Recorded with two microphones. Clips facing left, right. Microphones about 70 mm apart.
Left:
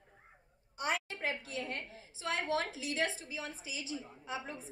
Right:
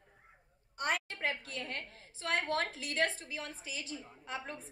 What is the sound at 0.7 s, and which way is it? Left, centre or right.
A woman's voice, right.